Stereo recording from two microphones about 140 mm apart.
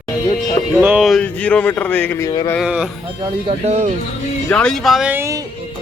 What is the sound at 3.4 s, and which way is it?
Speech, 50° right (ahead or behind).